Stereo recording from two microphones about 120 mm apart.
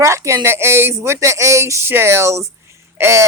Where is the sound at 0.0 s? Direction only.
25° right (ahead or behind).